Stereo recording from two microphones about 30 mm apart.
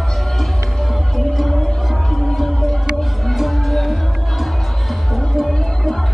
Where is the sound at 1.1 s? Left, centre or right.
Centre.